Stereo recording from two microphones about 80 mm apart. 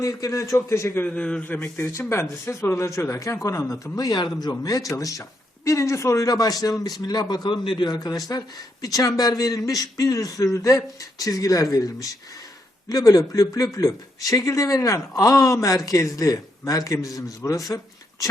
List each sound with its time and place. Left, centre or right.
0.0 s speech: left
1.0 s a man's voice: centre
1.7 s speech: left
3.9 s speech: left
7.9 s speech: left